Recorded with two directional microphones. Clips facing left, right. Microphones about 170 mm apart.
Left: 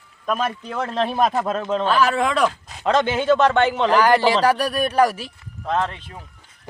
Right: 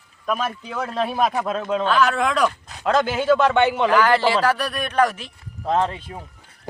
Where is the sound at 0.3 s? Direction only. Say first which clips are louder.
Left 1 dB; centre (ahead or behind).